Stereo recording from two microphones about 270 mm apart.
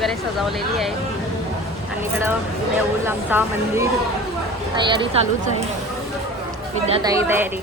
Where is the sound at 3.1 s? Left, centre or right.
Centre.